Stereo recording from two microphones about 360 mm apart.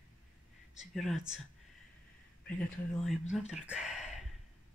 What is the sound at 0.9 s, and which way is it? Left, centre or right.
Speech, centre.